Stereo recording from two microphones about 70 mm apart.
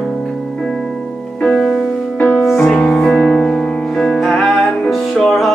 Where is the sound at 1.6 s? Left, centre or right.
Centre.